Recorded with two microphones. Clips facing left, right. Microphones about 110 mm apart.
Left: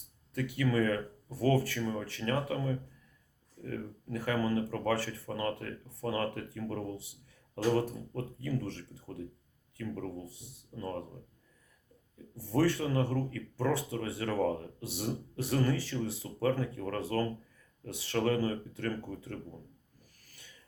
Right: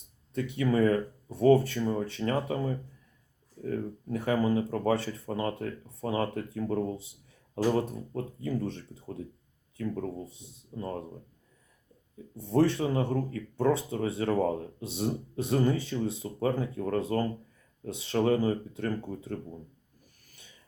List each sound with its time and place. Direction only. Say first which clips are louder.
0.3 s speech: right 3 dB; 25° right (ahead or behind)
12.4 s speech: right 4 dB; 25° right (ahead or behind)